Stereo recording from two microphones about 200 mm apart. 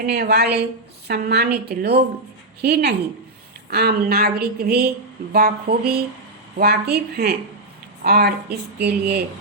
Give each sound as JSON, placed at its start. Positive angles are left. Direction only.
{"t": 0.0, "sound": "speech", "side_deg": -50}